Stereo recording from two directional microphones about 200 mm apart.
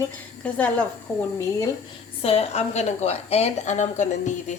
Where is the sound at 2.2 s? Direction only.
30° left (ahead or behind).